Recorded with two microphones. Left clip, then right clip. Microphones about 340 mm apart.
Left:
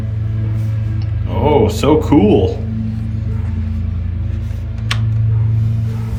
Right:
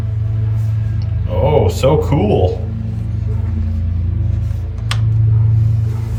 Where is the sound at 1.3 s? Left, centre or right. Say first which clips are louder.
Left 1 dB; centre.